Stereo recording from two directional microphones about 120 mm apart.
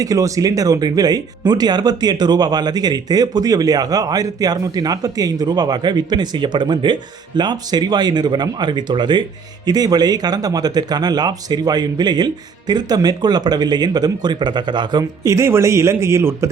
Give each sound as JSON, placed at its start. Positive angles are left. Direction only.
{"t": 0.0, "sound": "speech", "side_deg": -30}
{"t": 15.2, "sound": "a man's voice", "side_deg": -25}